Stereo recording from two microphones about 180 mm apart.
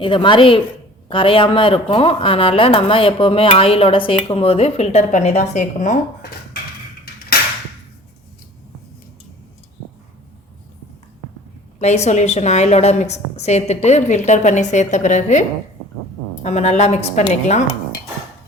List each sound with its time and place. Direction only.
0.0 s a woman's voice: 25° left (ahead or behind); by 6.0 s 45° left (ahead or behind)
11.8 s a woman's voice: 40° left (ahead or behind)